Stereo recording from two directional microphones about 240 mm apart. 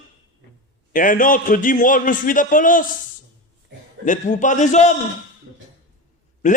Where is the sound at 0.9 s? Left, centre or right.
Left.